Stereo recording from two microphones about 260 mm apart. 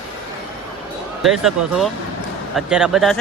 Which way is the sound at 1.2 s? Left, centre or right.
Centre.